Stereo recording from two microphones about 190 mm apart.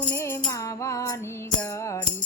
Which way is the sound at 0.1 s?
15° left (ahead or behind).